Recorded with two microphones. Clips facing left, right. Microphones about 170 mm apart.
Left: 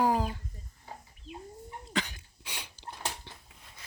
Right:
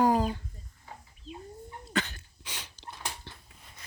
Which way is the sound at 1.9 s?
10° left (ahead or behind).